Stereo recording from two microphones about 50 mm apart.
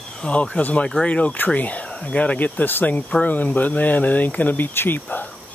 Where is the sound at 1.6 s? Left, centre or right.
Left.